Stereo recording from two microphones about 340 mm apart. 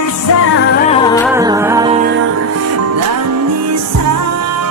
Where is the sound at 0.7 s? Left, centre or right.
Centre.